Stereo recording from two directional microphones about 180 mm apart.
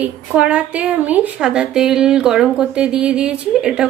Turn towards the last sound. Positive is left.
turn(degrees=-5)  # may be behind; listen again after turning